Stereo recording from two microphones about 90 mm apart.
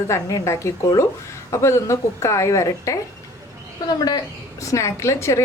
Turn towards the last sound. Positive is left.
turn(degrees=35)  # may be behind; listen again after turning